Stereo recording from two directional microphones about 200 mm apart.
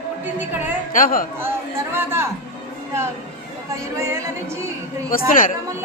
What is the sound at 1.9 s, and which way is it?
Speech, 10° right (ahead or behind).